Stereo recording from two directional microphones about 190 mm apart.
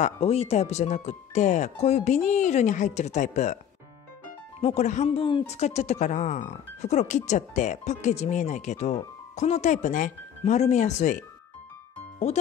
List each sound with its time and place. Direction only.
0.0 s speech: 30° left (ahead or behind)
4.6 s speech: 35° left (ahead or behind)